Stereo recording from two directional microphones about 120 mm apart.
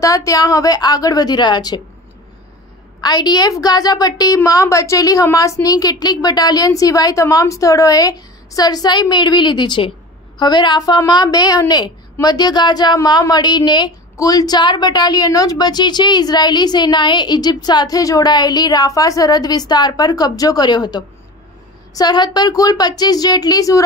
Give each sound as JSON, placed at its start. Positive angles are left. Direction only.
{"t": 0.0, "sound": "a woman's voice", "side_deg": 30}
{"t": 3.0, "sound": "a woman's voice", "side_deg": 35}